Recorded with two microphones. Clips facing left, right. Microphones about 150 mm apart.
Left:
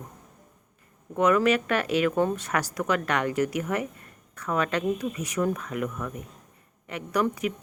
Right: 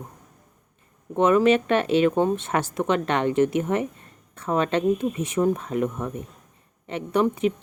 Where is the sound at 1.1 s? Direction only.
25° right (ahead or behind).